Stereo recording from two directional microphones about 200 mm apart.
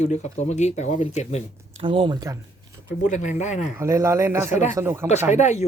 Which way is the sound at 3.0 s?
35° left (ahead or behind).